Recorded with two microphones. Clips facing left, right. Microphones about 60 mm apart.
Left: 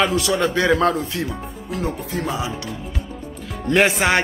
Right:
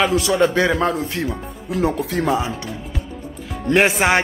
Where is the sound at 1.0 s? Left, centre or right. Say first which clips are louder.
Right 2 dB; right.